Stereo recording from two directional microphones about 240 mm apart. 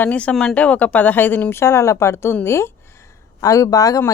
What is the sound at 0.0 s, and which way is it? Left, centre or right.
Speech, centre.